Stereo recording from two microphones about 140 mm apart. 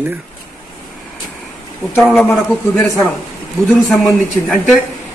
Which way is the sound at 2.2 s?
20° left (ahead or behind).